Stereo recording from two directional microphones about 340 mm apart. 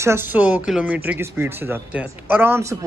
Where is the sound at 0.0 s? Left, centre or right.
Centre.